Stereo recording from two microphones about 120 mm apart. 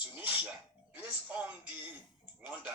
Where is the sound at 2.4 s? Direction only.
15° right (ahead or behind).